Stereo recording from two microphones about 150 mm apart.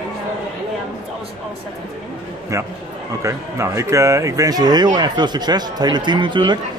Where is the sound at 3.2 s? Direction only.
20° right (ahead or behind).